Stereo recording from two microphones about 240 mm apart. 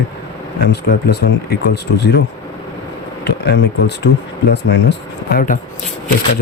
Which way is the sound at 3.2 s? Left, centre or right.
Left.